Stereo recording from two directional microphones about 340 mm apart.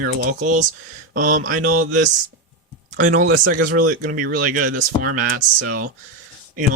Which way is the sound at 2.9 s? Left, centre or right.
Right.